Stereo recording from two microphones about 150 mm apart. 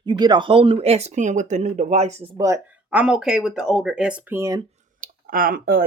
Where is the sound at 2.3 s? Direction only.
20° right (ahead or behind).